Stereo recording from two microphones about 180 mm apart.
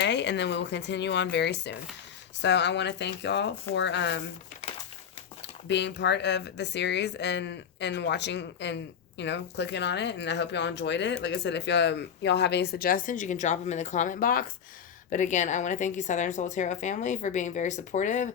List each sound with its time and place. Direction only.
0.0 s speech: 75° left (ahead or behind)
5.6 s speech: 75° left (ahead or behind); by 14.5 s 50° left (ahead or behind)
15.1 s a woman's voice: 40° left (ahead or behind)